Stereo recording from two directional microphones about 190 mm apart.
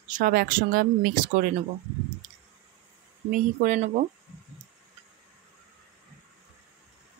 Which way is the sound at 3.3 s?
45° right (ahead or behind).